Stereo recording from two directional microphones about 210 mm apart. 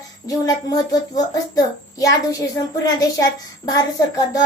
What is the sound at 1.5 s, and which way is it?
A child's voice, 15° left (ahead or behind).